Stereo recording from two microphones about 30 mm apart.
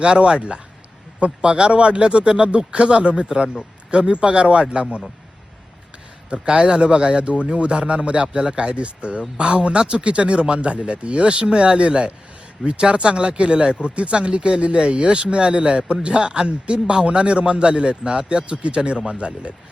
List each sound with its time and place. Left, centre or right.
0.0 s speech: right
6.3 s a man's voice: right
16.5 s speech: right